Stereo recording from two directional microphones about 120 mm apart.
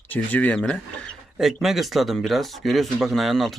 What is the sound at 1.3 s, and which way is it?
Speech, centre (ahead or behind).